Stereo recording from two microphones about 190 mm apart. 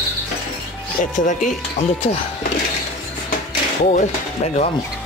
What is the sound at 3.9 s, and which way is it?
Speech, 40° left (ahead or behind).